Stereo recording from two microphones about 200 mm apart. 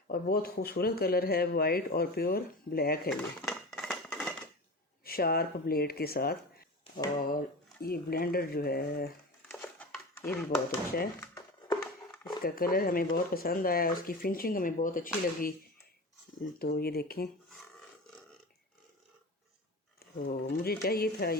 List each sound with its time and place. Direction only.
0.1 s speech: 50° left (ahead or behind)
3.1 s dishes: centre (ahead or behind)
5.0 s speech: 50° left (ahead or behind)
9.5 s a sound: 10° left (ahead or behind)
12.4 s speech: 45° left (ahead or behind)
16.6 s speech: 50° left (ahead or behind)
20.0 s speech: 50° left (ahead or behind)